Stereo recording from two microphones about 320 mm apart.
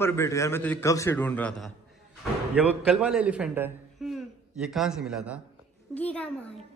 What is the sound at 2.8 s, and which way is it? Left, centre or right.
A man's voice, centre.